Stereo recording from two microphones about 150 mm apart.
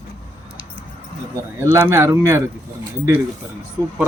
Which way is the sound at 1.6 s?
15° right (ahead or behind).